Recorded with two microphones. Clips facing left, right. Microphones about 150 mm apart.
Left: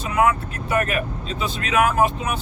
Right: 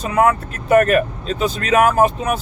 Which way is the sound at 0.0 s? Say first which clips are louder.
Right 4 dB; 45° right (ahead or behind).